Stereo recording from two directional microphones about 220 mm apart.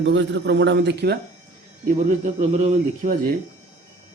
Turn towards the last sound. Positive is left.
turn(degrees=-35)  # may be behind; listen again after turning